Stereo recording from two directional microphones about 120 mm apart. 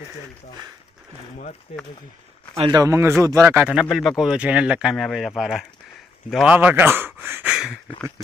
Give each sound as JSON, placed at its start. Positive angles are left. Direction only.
{"t": 2.7, "sound": "speech", "side_deg": -25}
{"t": 3.9, "sound": "speech", "side_deg": 0}
{"t": 6.4, "sound": "speech", "side_deg": -15}
{"t": 7.5, "sound": "a sound", "side_deg": -5}